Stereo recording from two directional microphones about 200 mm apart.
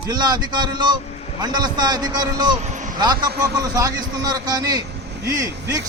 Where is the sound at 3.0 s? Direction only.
20° right (ahead or behind).